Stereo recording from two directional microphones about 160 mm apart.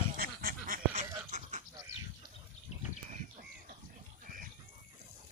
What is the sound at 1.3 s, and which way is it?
Goat, 45° right (ahead or behind).